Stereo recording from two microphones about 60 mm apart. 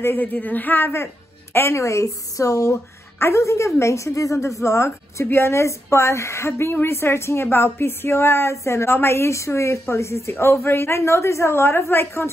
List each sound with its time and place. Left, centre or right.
0.2 s a woman's voice: left
2.7 s a woman's voice: left